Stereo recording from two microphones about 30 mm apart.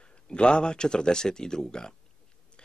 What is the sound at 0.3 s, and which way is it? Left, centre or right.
Speech, left.